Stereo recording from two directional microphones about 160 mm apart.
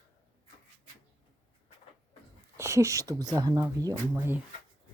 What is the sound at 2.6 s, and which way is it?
Speech, 20° right (ahead or behind).